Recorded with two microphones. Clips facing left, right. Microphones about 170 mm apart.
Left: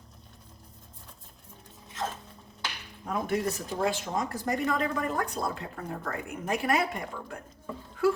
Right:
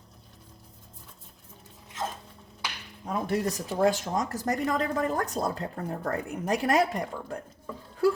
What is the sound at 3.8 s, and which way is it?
A woman's voice, 40° right (ahead or behind).